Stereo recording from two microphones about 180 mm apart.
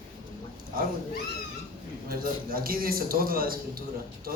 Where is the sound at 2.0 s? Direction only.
55° right (ahead or behind).